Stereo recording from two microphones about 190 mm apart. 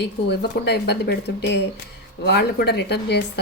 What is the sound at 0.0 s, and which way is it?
Speech, 60° left (ahead or behind).